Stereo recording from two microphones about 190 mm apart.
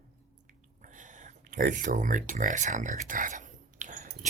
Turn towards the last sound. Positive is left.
turn(degrees=-40)  # may be behind; listen again after turning